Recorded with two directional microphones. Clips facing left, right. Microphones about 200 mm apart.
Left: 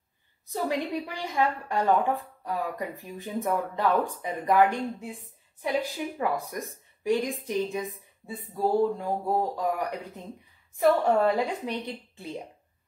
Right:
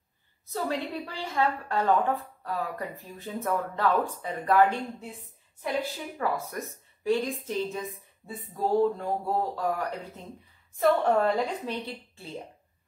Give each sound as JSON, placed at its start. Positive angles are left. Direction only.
{"t": 0.5, "sound": "a woman's voice", "side_deg": 15}